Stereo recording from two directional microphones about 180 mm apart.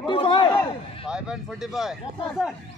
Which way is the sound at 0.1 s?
25° left (ahead or behind).